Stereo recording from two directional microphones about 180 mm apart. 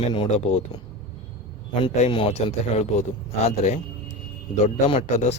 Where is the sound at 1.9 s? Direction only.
35° left (ahead or behind).